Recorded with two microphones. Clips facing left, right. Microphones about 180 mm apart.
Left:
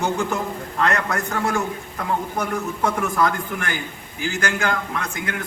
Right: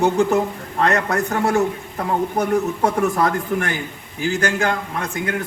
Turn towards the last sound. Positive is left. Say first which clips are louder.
# right 3 dB
turn(degrees=-30)  # may be behind; listen again after turning